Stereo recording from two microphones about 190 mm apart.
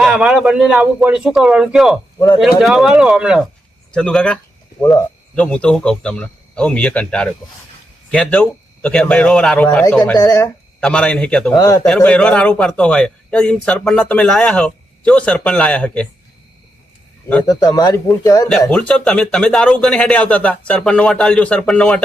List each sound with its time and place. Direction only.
0.0 s a man's voice: 5° right (ahead or behind)
2.1 s speech: 15° left (ahead or behind)
2.6 s a man's voice: centre (ahead or behind)
10.3 s a sound: 15° left (ahead or behind)
10.8 s a man's voice: 5° left (ahead or behind)
11.5 s speech: 20° left (ahead or behind)
11.9 s a man's voice: 5° left (ahead or behind)
17.5 s speech: 20° left (ahead or behind)
18.7 s a man's voice: 5° left (ahead or behind)